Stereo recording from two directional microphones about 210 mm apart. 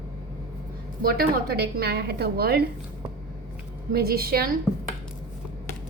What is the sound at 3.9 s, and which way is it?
Speech, 45° right (ahead or behind).